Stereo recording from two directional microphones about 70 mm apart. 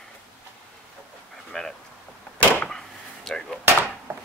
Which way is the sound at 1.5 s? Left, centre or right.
Centre.